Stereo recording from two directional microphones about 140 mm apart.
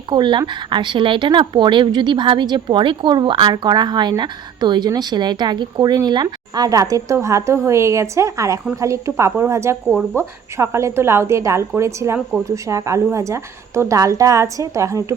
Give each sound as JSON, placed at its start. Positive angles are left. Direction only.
{"t": 0.1, "sound": "a woman's voice", "side_deg": -35}